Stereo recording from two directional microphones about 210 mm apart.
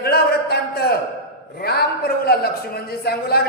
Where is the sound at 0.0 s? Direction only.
50° left (ahead or behind).